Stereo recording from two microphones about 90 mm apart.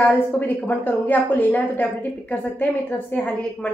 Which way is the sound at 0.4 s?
20° left (ahead or behind).